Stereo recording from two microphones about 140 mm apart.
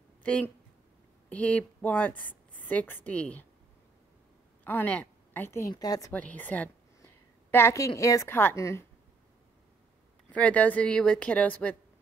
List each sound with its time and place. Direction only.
0.2 s a woman's voice: 10° left (ahead or behind)
4.6 s a woman's voice: 10° left (ahead or behind)
6.1 s a woman's voice: 10° left (ahead or behind)
10.3 s speech: 10° left (ahead or behind)